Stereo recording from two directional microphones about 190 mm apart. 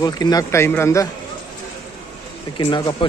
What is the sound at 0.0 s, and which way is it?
A man's voice, 20° left (ahead or behind).